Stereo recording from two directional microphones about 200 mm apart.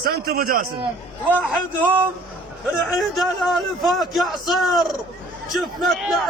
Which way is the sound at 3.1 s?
Centre (ahead or behind).